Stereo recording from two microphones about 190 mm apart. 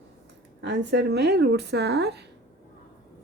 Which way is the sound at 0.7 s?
65° right (ahead or behind).